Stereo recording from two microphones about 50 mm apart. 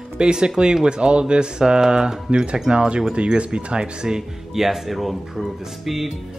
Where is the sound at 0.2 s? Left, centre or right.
Centre.